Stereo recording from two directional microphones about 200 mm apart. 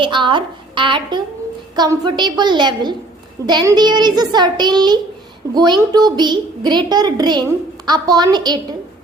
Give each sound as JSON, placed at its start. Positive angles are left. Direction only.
{"t": 0.0, "sound": "a woman's voice", "side_deg": -25}